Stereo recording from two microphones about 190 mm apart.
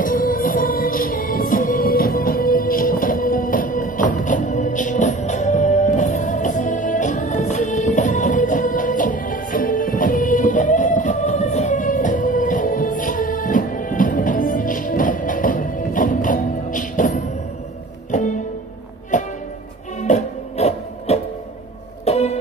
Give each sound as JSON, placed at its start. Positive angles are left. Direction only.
{"t": 0.0, "sound": "music", "side_deg": 45}